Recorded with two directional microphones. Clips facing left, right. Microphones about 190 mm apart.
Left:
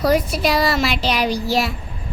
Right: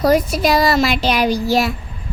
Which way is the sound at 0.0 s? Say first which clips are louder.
Right 3 dB; 45° right (ahead or behind).